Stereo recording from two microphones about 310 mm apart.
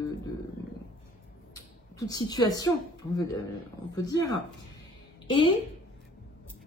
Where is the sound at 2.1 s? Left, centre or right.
Centre.